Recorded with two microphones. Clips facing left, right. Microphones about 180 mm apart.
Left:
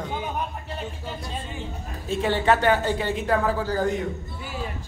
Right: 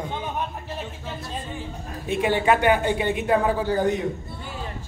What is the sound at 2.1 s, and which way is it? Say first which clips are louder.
A woman's voice: right 1 dB; 15° right (ahead or behind).